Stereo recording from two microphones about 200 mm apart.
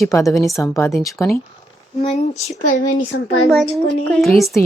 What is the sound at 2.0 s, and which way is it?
Speech, 35° left (ahead or behind).